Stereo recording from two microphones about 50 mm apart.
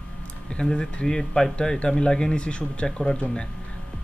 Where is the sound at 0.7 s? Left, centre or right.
Centre.